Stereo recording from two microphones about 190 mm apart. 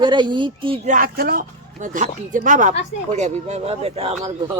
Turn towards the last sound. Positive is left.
turn(degrees=-30)  # may be behind; listen again after turning